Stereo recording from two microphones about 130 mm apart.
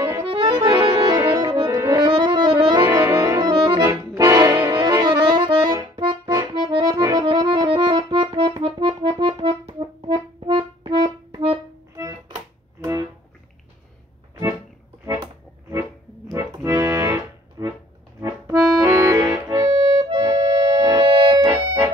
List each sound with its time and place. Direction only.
0.2 s accordion: 40° right (ahead or behind)
0.6 s accordion: 20° right (ahead or behind)
1.2 s music: 30° right (ahead or behind)
2.0 s music: 35° right (ahead or behind)
2.9 s brass instrument: 20° right (ahead or behind)
3.3 s accordion: 35° right (ahead or behind)
4.2 s brass instrument: 25° right (ahead or behind)
4.7 s accordion: 35° right (ahead or behind)
11.9 s music: 30° right (ahead or behind)
16.3 s accordion: 20° right (ahead or behind)